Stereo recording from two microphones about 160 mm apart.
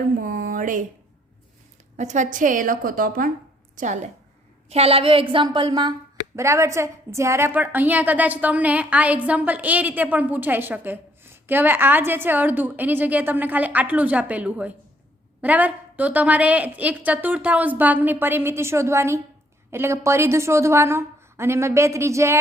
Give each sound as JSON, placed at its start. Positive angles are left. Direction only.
{"t": 0.2, "sound": "a sound", "side_deg": -60}
{"t": 2.0, "sound": "a woman's voice", "side_deg": -50}
{"t": 3.8, "sound": "a woman's voice", "side_deg": -50}
{"t": 4.7, "sound": "a woman's voice", "side_deg": -40}